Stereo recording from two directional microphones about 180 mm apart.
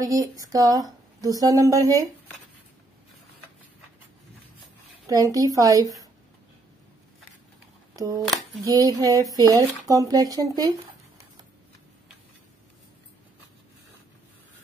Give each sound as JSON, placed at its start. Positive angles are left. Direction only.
{"t": 0.0, "sound": "speech", "side_deg": -20}
{"t": 5.0, "sound": "speech", "side_deg": -20}
{"t": 7.9, "sound": "speech", "side_deg": -20}